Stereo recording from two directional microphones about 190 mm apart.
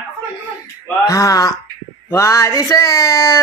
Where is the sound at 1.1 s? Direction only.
20° left (ahead or behind).